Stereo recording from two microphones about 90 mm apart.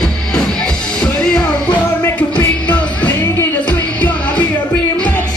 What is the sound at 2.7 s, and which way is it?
Music, 15° left (ahead or behind).